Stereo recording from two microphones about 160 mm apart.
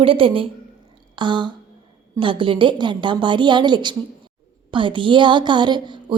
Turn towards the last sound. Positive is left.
turn(degrees=-30)  # may be behind; listen again after turning